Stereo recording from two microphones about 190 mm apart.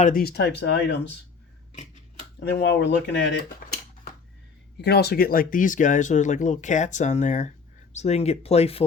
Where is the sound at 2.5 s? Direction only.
60° left (ahead or behind).